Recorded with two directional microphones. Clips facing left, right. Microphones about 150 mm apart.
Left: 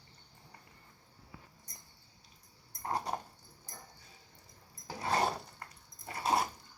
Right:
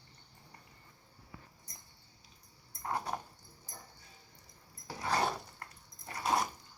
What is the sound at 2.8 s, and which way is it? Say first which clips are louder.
Dog: left 1 dB; 35° left (ahead or behind).